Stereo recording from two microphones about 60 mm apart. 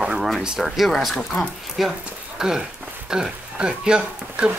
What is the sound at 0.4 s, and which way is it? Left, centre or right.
Speech, centre.